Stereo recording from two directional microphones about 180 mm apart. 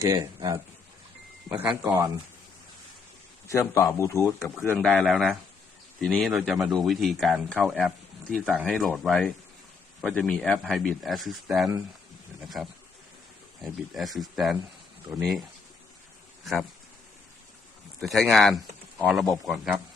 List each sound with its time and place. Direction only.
0.0 s speech: 20° right (ahead or behind)
1.5 s speech: 10° right (ahead or behind)
3.5 s speech: 15° left (ahead or behind); by 16.6 s centre (ahead or behind)
18.0 s speech: centre (ahead or behind)